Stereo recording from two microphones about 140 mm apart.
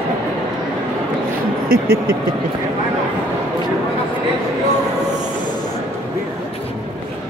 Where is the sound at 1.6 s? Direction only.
90° right.